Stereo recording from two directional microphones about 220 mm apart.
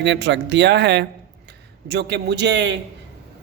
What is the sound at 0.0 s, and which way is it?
Speech, 55° right (ahead or behind).